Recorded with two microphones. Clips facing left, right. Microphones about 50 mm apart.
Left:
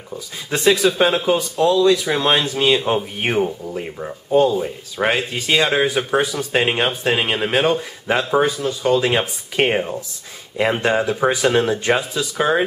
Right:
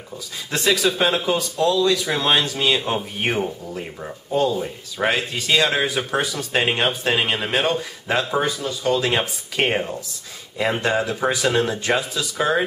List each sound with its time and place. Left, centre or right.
0.8 s speech: centre